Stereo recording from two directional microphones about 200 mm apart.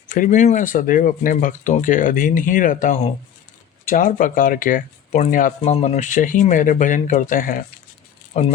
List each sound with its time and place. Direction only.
0.1 s speech: 40° left (ahead or behind)
8.3 s speech: 35° left (ahead or behind)